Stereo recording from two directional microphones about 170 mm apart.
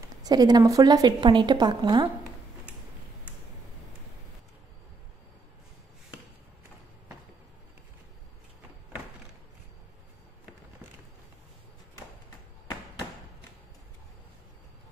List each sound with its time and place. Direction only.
0.2 s a woman's voice: 25° right (ahead or behind)